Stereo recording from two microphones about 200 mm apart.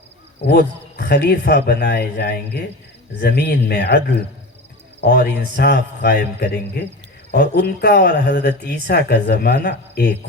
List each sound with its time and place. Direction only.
0.4 s speech: 55° left (ahead or behind)